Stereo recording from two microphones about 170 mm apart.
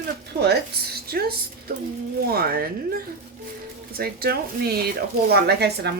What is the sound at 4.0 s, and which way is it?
Speech, 65° right (ahead or behind).